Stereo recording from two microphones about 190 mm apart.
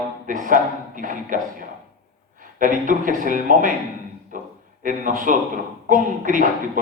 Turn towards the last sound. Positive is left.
turn(degrees=-45)  # may be behind; listen again after turning